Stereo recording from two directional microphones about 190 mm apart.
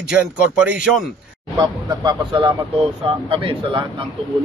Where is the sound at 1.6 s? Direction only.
25° right (ahead or behind).